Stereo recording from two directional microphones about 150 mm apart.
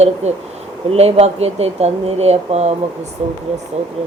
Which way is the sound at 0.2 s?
45° right (ahead or behind).